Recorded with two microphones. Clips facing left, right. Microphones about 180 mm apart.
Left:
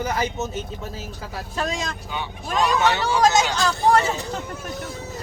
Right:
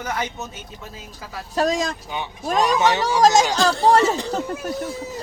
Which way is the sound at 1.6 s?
40° right (ahead or behind).